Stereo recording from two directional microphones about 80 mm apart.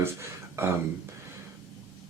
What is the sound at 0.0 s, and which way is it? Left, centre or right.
Speech, right.